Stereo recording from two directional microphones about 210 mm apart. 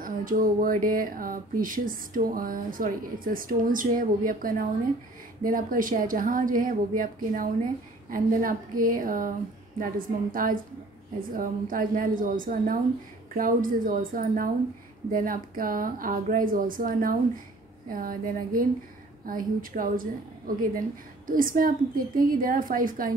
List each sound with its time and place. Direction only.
0.0 s speech: 40° right (ahead or behind)